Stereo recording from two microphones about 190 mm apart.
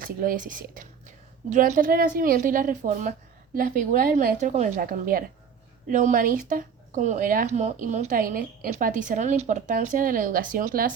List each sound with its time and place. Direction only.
0.0 s a woman's voice: 45° right (ahead or behind)